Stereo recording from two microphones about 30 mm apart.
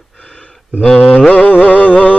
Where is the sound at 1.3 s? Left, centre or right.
Left.